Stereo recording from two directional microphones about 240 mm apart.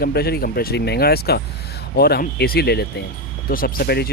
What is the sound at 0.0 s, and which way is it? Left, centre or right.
Speech, left.